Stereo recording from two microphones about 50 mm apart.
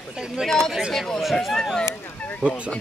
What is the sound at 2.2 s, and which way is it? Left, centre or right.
Speech, left.